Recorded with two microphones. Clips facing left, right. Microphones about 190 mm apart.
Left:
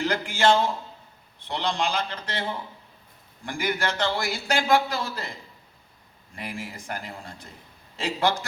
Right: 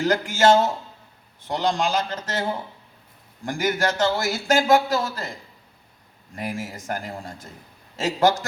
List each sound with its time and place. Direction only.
0.0 s a man's voice: 45° right (ahead or behind)
6.3 s a man's voice: 45° right (ahead or behind)